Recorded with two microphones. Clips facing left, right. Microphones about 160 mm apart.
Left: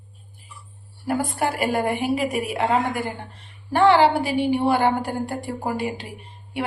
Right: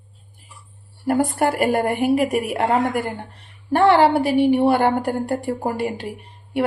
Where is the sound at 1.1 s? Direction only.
50° right (ahead or behind).